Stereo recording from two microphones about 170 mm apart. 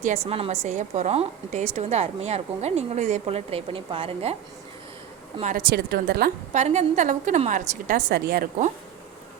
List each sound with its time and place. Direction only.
0.3 s a woman's voice: 35° right (ahead or behind)
5.4 s a woman's voice: 45° right (ahead or behind)
5.7 s a woman's voice: 70° right (ahead or behind)
6.5 s a woman's voice: 40° right (ahead or behind); by 8.4 s 60° right (ahead or behind)